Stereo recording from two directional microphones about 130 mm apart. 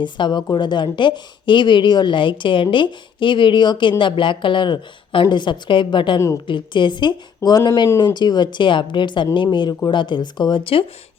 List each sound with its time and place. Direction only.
0.0 s a woman's voice: 35° left (ahead or behind)
6.1 s a woman's voice: 25° left (ahead or behind)
6.5 s a woman's voice: 35° left (ahead or behind)